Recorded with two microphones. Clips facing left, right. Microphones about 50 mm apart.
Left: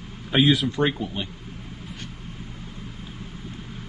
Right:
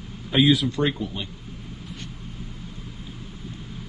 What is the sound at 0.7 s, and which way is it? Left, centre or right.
Speech, centre.